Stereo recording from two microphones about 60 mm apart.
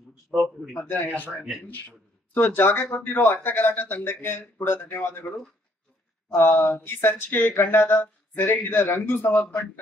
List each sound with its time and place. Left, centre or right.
0.7 s speech: left